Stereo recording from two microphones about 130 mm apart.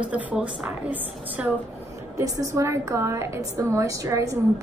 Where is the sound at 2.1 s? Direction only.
25° right (ahead or behind).